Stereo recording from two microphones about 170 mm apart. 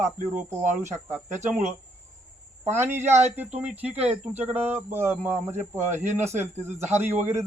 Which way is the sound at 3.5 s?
10° right (ahead or behind).